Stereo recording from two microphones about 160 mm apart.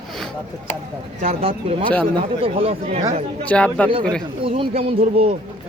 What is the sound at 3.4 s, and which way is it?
Speech, 10° left (ahead or behind).